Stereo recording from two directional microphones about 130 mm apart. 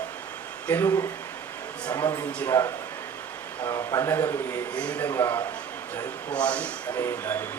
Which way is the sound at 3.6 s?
25° left (ahead or behind).